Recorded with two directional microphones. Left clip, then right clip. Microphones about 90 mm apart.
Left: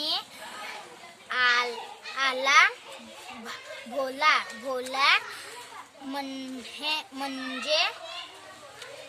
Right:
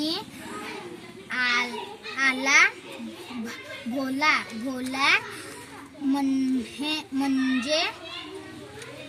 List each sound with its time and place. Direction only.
1.3 s a child's voice: 25° left (ahead or behind); by 2.7 s 40° left (ahead or behind)
3.9 s a child's voice: 40° left (ahead or behind)